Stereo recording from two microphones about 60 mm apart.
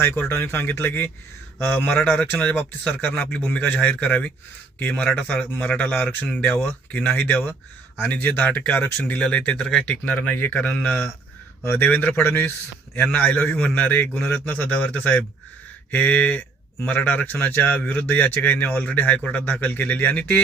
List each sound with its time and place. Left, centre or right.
0.0 s speech: left; by 9.8 s centre
9.8 s speech: left
10.3 s speech: left
10.7 s speech: left
11.6 s speech: left